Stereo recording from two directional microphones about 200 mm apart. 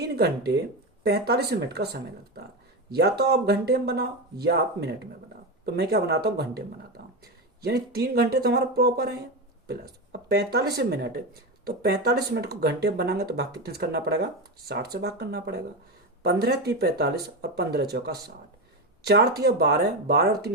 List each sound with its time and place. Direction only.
0.0 s speech: 55° right (ahead or behind)